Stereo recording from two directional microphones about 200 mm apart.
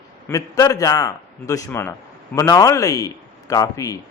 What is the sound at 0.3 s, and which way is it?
A man's voice, 15° left (ahead or behind).